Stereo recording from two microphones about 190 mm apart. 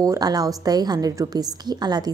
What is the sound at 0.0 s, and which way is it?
A woman's voice, 20° right (ahead or behind).